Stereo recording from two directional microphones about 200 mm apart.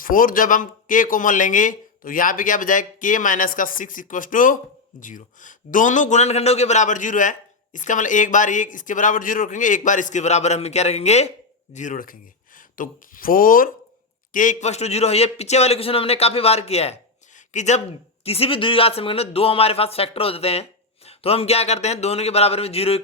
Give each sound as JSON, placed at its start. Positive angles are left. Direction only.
{"t": 0.0, "sound": "speech", "side_deg": 45}